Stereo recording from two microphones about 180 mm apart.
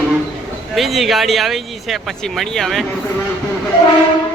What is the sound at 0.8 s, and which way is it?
Speech, centre (ahead or behind).